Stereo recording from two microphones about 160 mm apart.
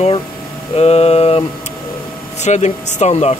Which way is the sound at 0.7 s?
40° left (ahead or behind).